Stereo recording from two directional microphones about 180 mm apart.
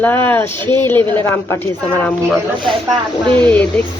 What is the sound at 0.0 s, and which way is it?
Speech, 10° left (ahead or behind).